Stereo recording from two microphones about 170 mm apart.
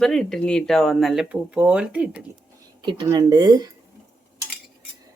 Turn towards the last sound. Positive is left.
turn(degrees=-25)  # may be behind; listen again after turning